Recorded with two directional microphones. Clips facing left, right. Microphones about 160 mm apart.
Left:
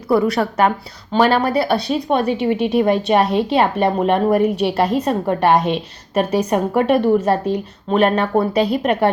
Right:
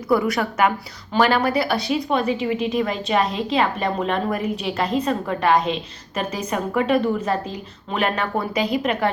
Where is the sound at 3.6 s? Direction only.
50° left (ahead or behind).